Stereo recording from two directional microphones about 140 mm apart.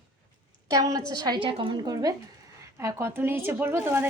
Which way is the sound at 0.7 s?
25° right (ahead or behind).